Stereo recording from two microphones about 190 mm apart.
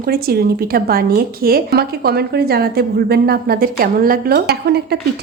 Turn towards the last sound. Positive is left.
turn(degrees=-60)  # may be behind; listen again after turning